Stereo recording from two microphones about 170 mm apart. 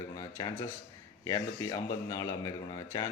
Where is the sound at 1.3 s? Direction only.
20° left (ahead or behind).